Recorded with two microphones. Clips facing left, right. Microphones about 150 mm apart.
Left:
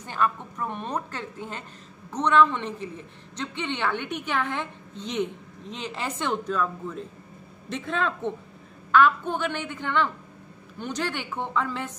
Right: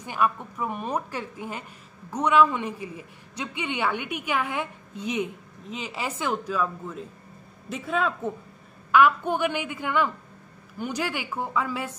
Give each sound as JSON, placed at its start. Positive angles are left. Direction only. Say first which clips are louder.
{"t": 0.0, "sound": "a woman's voice", "louder": "right 1 dB", "side_deg": -10}